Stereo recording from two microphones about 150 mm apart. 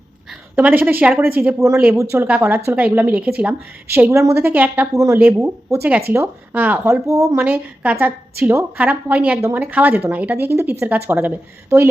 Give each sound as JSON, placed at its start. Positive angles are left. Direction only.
{"t": 0.5, "sound": "speech", "side_deg": -10}
{"t": 7.1, "sound": "a woman's voice", "side_deg": -20}
{"t": 7.4, "sound": "speech", "side_deg": -10}